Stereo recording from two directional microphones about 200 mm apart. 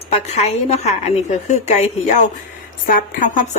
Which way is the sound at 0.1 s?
35° left (ahead or behind).